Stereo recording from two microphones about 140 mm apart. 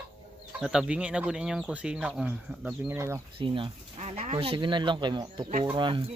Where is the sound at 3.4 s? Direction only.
40° right (ahead or behind).